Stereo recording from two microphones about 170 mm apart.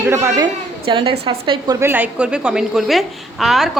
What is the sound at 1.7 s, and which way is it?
A woman's voice, 10° right (ahead or behind).